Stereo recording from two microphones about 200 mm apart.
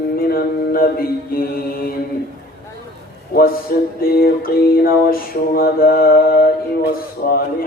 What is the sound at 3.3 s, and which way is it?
Mantra, 50° left (ahead or behind).